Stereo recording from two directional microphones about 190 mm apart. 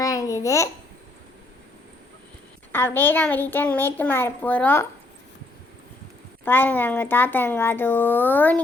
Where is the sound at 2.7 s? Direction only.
10° left (ahead or behind).